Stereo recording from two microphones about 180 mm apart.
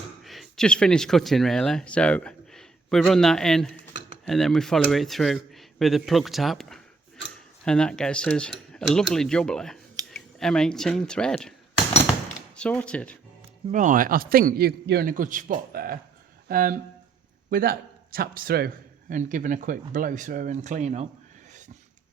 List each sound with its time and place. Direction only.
0.2 s speech: centre (ahead or behind)
12.5 s speech: 5° left (ahead or behind)
13.7 s a man's voice: 45° right (ahead or behind)